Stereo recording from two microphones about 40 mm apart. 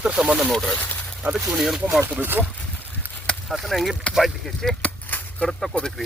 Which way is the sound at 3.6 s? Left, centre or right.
Centre.